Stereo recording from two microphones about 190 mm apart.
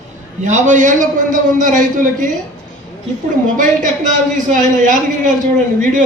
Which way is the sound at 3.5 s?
40° right (ahead or behind).